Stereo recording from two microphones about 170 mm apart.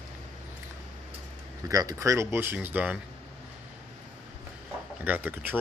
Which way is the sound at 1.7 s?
20° right (ahead or behind).